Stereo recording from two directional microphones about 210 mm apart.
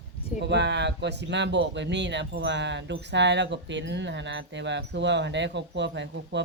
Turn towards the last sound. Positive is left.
turn(degrees=-55)  # may be behind; listen again after turning